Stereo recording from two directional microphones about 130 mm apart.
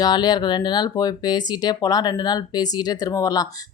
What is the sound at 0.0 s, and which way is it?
Speech, 35° left (ahead or behind).